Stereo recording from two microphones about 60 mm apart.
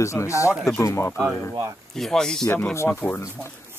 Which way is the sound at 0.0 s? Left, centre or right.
Left.